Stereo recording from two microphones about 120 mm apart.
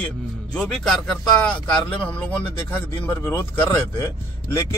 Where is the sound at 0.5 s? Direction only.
5° left (ahead or behind).